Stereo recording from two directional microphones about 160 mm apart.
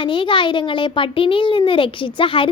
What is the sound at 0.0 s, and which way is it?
Speech, 30° left (ahead or behind).